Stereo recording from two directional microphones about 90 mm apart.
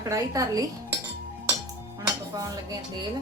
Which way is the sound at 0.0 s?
40° right (ahead or behind).